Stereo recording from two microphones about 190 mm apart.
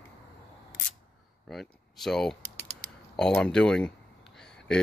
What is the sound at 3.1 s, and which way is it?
Speech, 5° left (ahead or behind).